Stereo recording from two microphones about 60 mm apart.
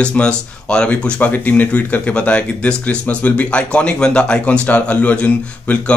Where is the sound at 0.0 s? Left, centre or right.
Centre.